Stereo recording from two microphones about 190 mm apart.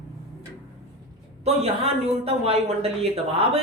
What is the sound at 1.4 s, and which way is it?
A woman's voice, 30° right (ahead or behind).